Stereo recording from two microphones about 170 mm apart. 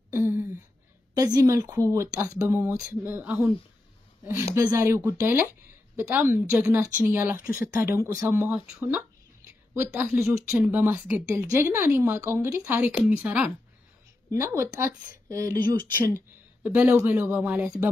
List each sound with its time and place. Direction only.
0.1 s a sound: 15° right (ahead or behind)
1.1 s speech: 20° right (ahead or behind)
14.3 s speech: 20° right (ahead or behind)
15.9 s speech: 15° right (ahead or behind)